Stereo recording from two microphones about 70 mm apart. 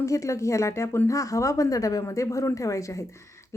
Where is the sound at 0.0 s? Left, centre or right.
Left.